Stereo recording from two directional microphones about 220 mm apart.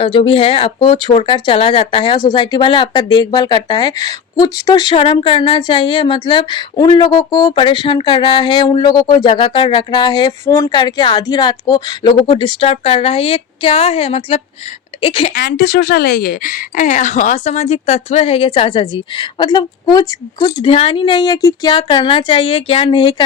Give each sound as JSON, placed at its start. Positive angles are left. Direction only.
{"t": 0.0, "sound": "speech", "side_deg": 25}
{"t": 15.4, "sound": "speech", "side_deg": 45}